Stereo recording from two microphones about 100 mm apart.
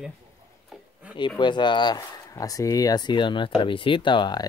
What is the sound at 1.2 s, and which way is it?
Speech, 50° left (ahead or behind).